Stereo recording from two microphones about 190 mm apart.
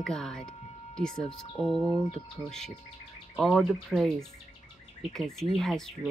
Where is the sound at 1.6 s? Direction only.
30° left (ahead or behind).